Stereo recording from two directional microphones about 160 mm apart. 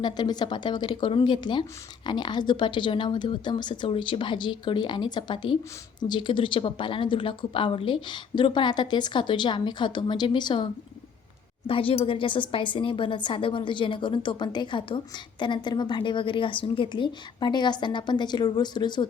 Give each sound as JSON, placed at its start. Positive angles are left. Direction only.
{"t": 0.0, "sound": "speech", "side_deg": 25}
{"t": 11.7, "sound": "speech", "side_deg": 35}